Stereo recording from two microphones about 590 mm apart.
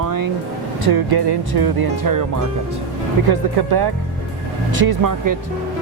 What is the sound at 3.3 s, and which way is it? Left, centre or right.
Speech, right.